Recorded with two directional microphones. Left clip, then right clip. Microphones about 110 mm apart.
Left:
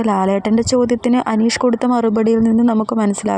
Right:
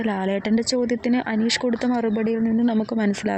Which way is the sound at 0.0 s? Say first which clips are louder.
Left 8 dB; 15° left (ahead or behind).